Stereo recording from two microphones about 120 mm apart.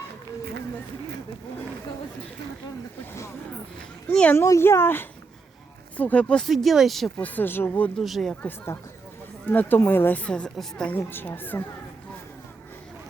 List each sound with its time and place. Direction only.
4.1 s speech: 10° left (ahead or behind)
4.4 s speech: 25° left (ahead or behind); by 7.1 s centre (ahead or behind)
7.2 s speech: 15° left (ahead or behind)
7.9 s speech: centre (ahead or behind)
8.4 s speech: 20° left (ahead or behind)